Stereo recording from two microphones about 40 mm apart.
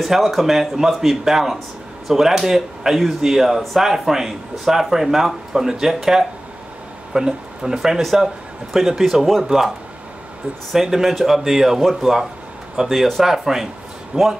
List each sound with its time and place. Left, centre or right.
0.0 s speech: centre
10.7 s speech: centre
14.1 s speech: right